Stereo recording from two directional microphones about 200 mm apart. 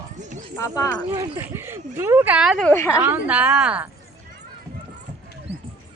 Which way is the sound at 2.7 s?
10° left (ahead or behind).